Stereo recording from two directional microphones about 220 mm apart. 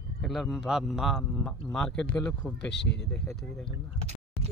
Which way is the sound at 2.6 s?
50° left (ahead or behind).